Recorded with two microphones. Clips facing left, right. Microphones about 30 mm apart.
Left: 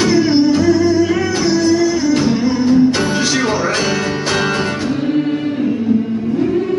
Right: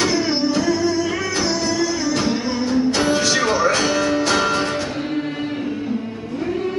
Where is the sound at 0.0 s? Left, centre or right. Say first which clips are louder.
Left 7 dB; centre.